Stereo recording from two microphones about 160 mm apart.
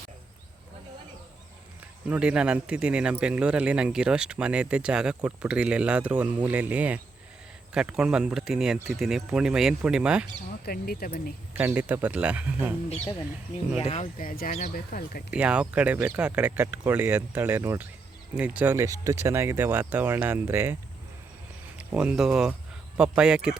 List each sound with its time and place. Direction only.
2.0 s a man's voice: 5° right (ahead or behind)
10.7 s speech: 70° left (ahead or behind)
11.5 s a man's voice: 10° right (ahead or behind)
13.7 s speech: 40° left (ahead or behind)
14.2 s speech: 60° left (ahead or behind)
15.3 s a man's voice: 5° right (ahead or behind)
21.8 s speech: 5° right (ahead or behind)